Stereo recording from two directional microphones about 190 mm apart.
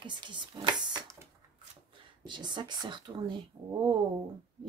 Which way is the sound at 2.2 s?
25° right (ahead or behind).